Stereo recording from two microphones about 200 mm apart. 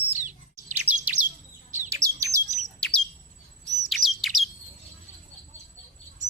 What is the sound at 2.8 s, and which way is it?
Bird, 5° left (ahead or behind).